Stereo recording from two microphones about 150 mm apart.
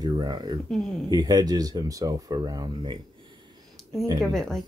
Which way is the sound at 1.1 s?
25° right (ahead or behind).